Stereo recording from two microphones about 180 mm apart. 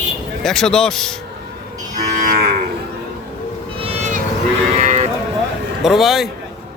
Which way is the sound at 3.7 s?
30° right (ahead or behind).